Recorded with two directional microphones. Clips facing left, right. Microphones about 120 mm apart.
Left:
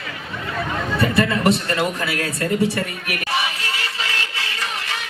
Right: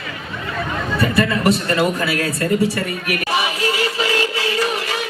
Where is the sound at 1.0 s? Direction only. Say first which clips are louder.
Right 1 dB; 25° left (ahead or behind).